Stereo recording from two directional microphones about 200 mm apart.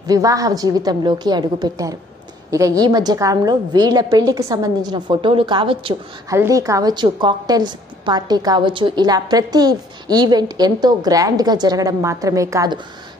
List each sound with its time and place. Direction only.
0.0 s a woman's voice: 15° right (ahead or behind)
6.3 s a woman's voice: 15° right (ahead or behind)